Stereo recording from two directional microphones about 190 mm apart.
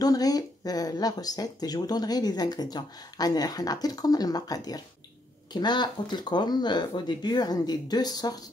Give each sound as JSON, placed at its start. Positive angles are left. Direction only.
{"t": 0.0, "sound": "speech", "side_deg": 20}